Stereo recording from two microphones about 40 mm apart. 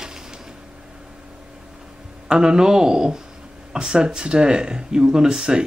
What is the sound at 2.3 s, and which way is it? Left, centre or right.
Speech, centre.